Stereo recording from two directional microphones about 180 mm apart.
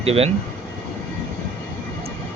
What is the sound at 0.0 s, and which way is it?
Speech, 35° right (ahead or behind).